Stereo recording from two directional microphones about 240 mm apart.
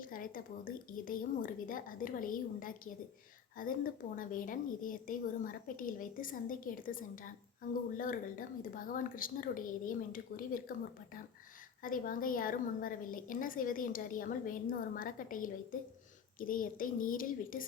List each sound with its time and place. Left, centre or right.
0.0 s a woman's voice: left